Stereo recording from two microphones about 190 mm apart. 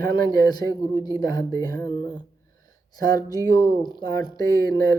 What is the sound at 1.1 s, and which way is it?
Speech, 20° left (ahead or behind).